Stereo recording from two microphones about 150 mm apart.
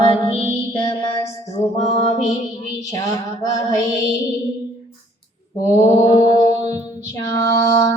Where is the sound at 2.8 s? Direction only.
25° left (ahead or behind).